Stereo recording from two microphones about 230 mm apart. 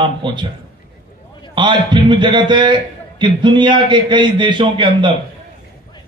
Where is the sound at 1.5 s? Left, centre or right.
Centre.